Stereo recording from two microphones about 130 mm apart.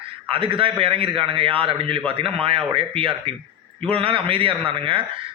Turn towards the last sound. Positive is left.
turn(degrees=-45)  # may be behind; listen again after turning